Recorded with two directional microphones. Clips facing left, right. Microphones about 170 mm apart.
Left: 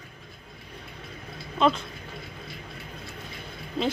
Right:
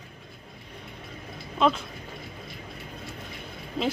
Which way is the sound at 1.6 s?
Centre (ahead or behind).